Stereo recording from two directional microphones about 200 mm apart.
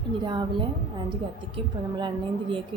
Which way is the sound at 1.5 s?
25° right (ahead or behind).